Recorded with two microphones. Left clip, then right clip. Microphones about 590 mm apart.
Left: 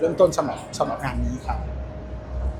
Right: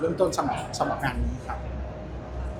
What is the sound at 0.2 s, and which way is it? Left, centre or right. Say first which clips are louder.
Speech: left 8 dB; left.